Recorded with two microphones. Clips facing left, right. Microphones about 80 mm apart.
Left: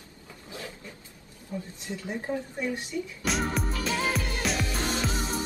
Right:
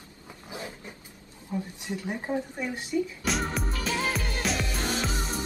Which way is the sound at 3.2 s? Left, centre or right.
Centre.